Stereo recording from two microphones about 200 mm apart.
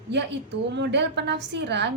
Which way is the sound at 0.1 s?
60° right (ahead or behind).